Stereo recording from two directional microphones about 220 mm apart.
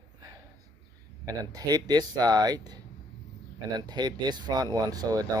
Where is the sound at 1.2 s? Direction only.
15° right (ahead or behind).